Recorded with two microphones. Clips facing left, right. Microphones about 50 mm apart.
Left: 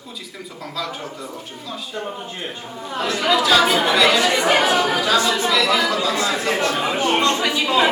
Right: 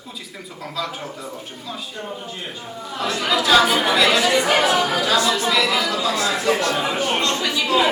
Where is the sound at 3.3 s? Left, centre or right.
Centre.